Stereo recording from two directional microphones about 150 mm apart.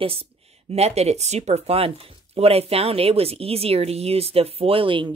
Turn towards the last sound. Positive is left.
turn(degrees=-35)  # may be behind; listen again after turning